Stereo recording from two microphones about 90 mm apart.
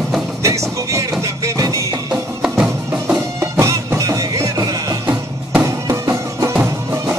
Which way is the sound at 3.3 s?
30° right (ahead or behind).